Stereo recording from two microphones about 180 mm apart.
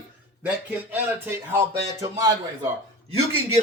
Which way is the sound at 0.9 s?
15° right (ahead or behind).